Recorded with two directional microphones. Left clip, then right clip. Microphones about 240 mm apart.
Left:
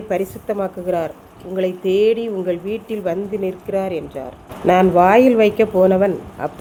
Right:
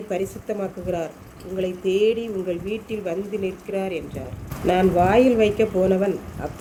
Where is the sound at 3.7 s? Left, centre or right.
Centre.